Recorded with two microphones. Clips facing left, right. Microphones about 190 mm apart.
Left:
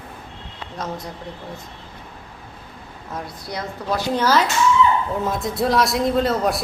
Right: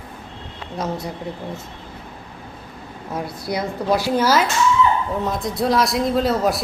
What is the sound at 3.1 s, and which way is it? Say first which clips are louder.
A woman's voice: right 5 dB; 10° right (ahead or behind).